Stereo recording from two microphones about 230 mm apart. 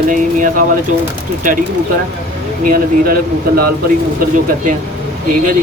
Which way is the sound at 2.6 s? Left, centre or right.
Right.